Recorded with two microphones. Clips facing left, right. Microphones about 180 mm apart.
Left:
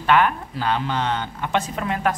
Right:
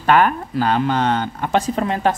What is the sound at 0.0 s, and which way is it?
Speech, 40° right (ahead or behind).